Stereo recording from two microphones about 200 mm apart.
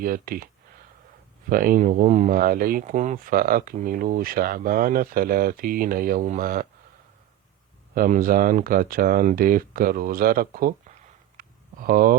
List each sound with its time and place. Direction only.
0.0 s speech: 45° right (ahead or behind)
1.5 s speech: 45° right (ahead or behind)
7.9 s speech: 45° right (ahead or behind)
11.3 s a sound: 45° right (ahead or behind)